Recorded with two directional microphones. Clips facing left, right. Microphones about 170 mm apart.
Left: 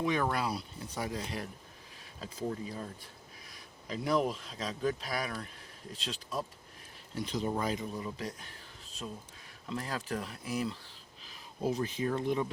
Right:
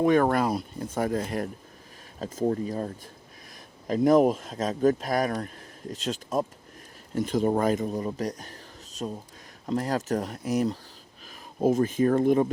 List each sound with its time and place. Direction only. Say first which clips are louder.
0.0 s speech: right 10 dB; 50° right (ahead or behind)